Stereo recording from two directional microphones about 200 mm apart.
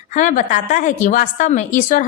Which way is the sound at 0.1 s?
40° left (ahead or behind).